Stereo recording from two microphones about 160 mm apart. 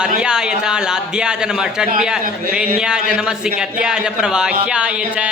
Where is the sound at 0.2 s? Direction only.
5° right (ahead or behind).